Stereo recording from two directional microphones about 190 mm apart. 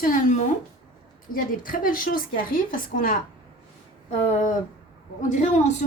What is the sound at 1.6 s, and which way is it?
A woman's voice, 45° left (ahead or behind).